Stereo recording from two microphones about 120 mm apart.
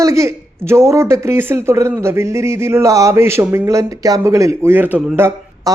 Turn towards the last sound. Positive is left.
turn(degrees=-20)  # may be behind; listen again after turning